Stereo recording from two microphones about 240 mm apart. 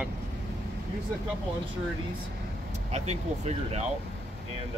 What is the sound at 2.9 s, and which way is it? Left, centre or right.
Speech, right.